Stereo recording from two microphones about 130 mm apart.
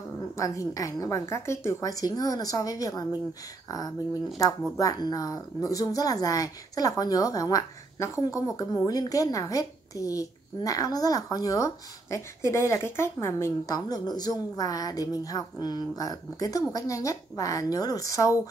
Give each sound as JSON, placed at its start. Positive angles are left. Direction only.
{"t": 0.4, "sound": "speech", "side_deg": 25}
{"t": 13.7, "sound": "speech", "side_deg": 30}